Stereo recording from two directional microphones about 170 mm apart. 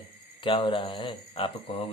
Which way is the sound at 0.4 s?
30° left (ahead or behind).